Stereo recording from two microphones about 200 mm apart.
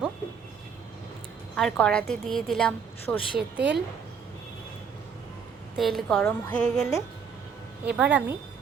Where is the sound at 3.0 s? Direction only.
25° left (ahead or behind).